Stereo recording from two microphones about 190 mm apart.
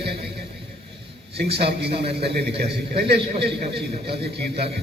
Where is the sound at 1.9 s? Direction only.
30° right (ahead or behind).